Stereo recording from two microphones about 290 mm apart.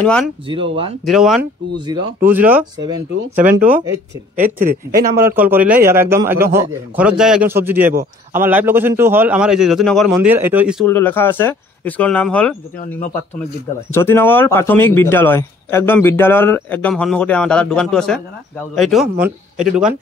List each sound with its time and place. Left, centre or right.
1.0 s a man's voice: centre
1.9 s a man's voice: centre
3.1 s speech: right
5.1 s a man's voice: centre
13.9 s a man's voice: centre